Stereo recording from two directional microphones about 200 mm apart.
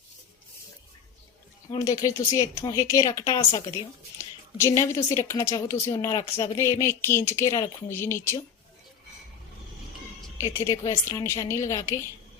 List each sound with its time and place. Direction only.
1.7 s speech: 15° left (ahead or behind)
10.4 s speech: 15° left (ahead or behind)